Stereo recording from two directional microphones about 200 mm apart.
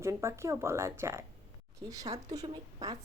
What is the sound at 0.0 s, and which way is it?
Speech, 15° right (ahead or behind).